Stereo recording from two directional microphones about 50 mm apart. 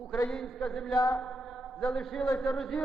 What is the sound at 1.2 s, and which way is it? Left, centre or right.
Mantra, centre.